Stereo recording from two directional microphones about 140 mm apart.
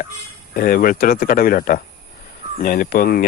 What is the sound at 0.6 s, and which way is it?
Speech, 90° left.